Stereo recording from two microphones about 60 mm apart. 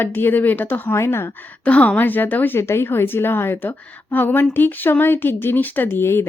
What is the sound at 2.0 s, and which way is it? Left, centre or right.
Speech, left.